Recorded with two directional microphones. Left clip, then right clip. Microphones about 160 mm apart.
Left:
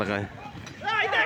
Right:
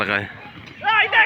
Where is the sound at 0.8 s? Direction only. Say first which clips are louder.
Right 8 dB; 25° right (ahead or behind).